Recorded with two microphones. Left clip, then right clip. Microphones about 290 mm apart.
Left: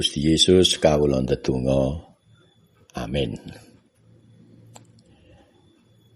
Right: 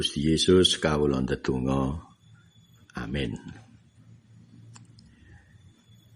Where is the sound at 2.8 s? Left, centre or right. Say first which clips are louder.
Left 7 dB; centre.